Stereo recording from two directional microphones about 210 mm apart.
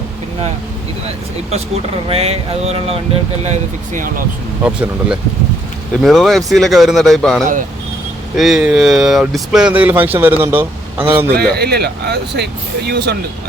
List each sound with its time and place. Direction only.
1.0 s speech: 30° right (ahead or behind)
4.6 s speech: 5° right (ahead or behind)
11.3 s speech: 50° right (ahead or behind)